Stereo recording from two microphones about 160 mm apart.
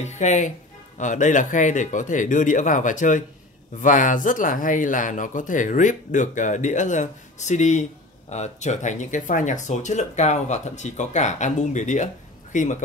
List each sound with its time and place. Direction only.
0.0 s speech: 45° left (ahead or behind)